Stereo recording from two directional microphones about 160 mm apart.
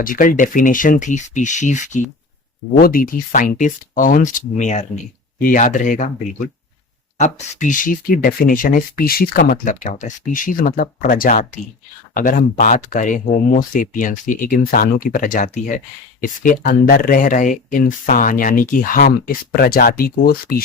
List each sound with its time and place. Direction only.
0.0 s speech: 60° left (ahead or behind)
2.7 s speech: 65° left (ahead or behind)